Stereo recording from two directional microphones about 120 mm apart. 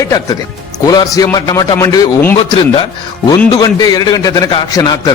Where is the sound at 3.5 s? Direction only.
35° left (ahead or behind).